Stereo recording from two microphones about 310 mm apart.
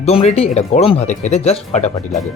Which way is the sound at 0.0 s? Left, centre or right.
Centre.